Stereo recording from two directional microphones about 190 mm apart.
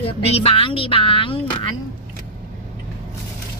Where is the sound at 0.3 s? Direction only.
30° left (ahead or behind).